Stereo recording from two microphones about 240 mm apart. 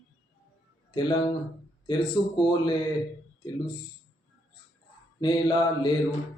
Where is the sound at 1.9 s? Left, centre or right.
Centre.